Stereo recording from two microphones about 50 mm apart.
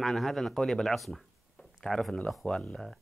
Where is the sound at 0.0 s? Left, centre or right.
Centre.